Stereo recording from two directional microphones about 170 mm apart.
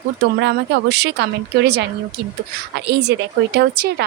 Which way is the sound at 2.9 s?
80° right.